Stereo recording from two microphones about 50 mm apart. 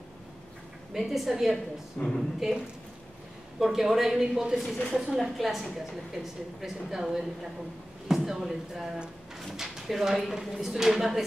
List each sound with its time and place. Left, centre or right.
0.9 s a woman's voice: centre
2.0 s a woman's voice: left
2.4 s a woman's voice: centre